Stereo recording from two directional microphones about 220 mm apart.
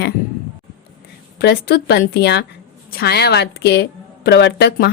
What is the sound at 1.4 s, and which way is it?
A woman's voice, 45° left (ahead or behind).